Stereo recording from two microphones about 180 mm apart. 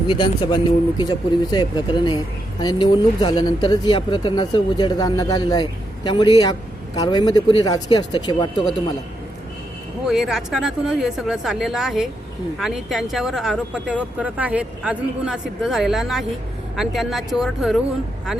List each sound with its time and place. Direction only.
0.1 s speech: 25° left (ahead or behind)
10.1 s speech: centre (ahead or behind)